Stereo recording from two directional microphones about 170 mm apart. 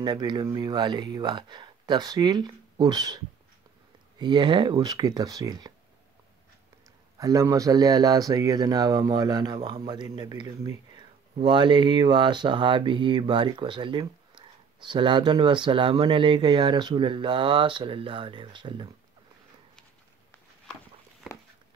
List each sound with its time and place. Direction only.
0.0 s speech: 25° right (ahead or behind)
4.2 s speech: 25° right (ahead or behind)
7.2 s speech: 20° right (ahead or behind)